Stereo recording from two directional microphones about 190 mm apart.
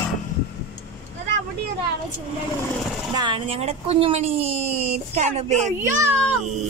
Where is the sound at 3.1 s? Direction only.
25° right (ahead or behind).